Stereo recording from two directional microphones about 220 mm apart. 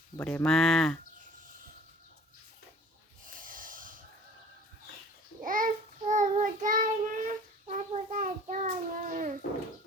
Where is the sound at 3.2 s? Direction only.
40° right (ahead or behind).